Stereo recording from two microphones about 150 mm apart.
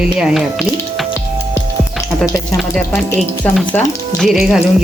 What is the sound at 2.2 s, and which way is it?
Sizzle, 20° left (ahead or behind).